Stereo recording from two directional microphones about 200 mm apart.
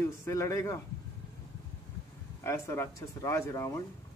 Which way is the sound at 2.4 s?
15° left (ahead or behind).